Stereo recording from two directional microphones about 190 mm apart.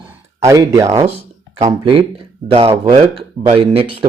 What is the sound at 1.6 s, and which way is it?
A man's voice, 30° right (ahead or behind).